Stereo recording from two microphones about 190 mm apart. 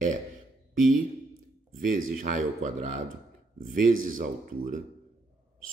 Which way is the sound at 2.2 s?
40° right (ahead or behind).